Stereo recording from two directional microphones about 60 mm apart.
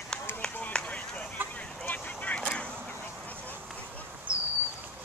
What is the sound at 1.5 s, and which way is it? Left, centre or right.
Vehicle, left.